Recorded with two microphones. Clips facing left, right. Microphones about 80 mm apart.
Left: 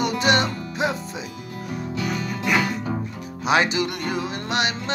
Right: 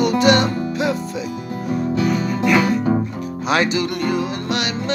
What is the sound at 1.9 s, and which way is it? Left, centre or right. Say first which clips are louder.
Music: right 7 dB; right.